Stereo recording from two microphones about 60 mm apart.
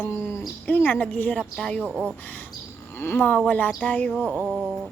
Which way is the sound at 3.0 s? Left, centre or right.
Left.